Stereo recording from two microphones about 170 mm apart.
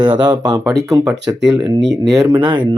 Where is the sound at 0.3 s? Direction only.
25° right (ahead or behind).